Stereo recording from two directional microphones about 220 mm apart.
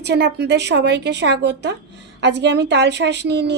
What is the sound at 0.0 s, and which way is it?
A woman's voice, 50° right (ahead or behind).